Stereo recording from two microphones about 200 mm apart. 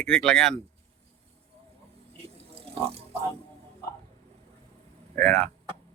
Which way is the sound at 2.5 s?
30° right (ahead or behind).